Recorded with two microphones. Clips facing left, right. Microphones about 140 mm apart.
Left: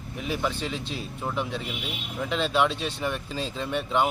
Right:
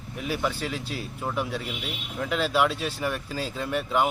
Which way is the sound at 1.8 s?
10° left (ahead or behind).